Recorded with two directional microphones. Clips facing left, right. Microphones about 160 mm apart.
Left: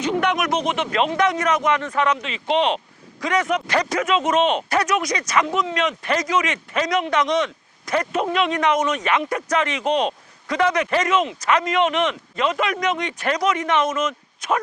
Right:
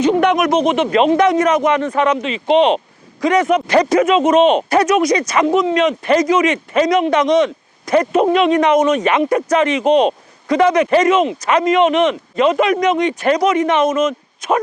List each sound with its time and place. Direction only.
0.0 s a man's voice: 30° right (ahead or behind)
4.8 s speech: 30° right (ahead or behind); by 14.6 s 15° right (ahead or behind)